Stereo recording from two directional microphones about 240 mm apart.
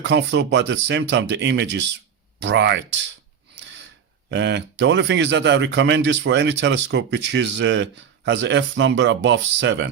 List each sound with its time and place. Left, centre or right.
0.0 s speech: right
3.6 s gasp: right
4.3 s speech: right